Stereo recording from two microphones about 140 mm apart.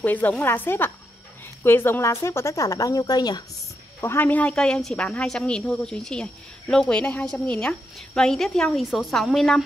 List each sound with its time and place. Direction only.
0.0 s a woman's voice: 10° left (ahead or behind); by 3.4 s 30° left (ahead or behind)
4.0 s speech: 15° left (ahead or behind)